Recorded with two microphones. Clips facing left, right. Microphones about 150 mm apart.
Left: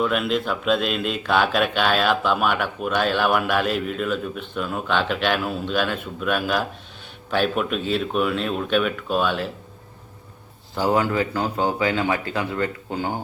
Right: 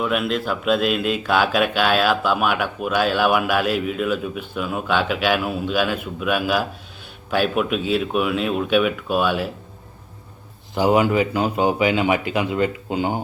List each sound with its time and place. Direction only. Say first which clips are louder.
0.0 s speech: even; 5° right (ahead or behind)
10.8 s speech: right 4 dB; 15° right (ahead or behind)